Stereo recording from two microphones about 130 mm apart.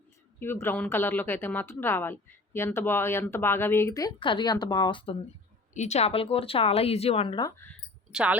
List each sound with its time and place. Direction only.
0.3 s a woman's voice: 20° left (ahead or behind)
4.2 s speech: 40° left (ahead or behind)
5.7 s a woman's voice: 65° left (ahead or behind)
8.1 s speech: 10° right (ahead or behind)